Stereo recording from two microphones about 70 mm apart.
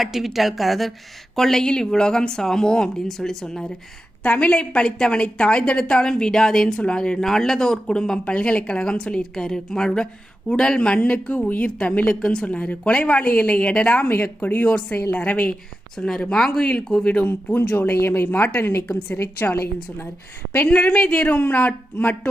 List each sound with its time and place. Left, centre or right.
0.0 s a woman's voice: centre
17.2 s speech: left
20.7 s speech: centre